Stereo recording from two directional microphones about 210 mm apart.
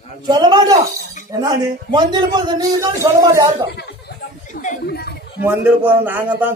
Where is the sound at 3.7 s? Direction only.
55° left (ahead or behind).